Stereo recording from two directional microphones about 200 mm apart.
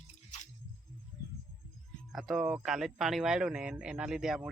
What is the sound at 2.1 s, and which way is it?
Speech, centre (ahead or behind).